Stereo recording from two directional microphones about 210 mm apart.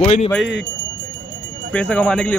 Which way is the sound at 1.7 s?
5° left (ahead or behind).